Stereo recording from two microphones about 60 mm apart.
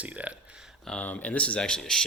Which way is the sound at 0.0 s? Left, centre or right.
Right.